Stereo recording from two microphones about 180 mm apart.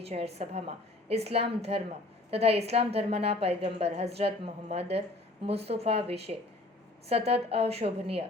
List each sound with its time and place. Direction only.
0.0 s a woman's voice: 35° right (ahead or behind)